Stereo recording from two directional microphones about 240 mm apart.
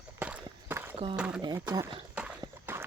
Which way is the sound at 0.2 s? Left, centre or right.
Centre.